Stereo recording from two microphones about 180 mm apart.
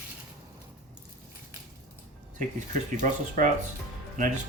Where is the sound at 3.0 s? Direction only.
45° right (ahead or behind).